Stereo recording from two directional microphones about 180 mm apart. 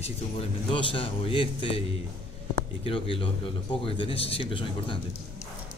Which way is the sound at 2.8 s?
30° left (ahead or behind).